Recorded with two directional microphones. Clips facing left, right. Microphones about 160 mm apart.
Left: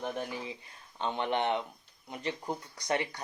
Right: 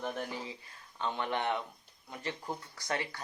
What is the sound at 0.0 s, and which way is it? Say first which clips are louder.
Speech: left 2 dB; 15° left (ahead or behind).